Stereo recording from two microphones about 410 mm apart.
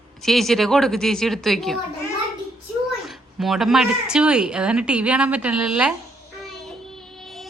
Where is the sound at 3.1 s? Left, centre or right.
Centre.